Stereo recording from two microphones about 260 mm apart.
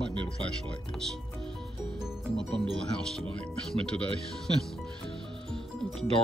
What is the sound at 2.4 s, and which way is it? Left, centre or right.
Speech, centre.